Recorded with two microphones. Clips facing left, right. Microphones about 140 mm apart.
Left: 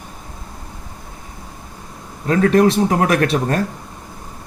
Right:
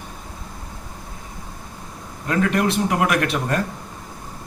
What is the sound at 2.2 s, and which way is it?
Speech, 35° left (ahead or behind).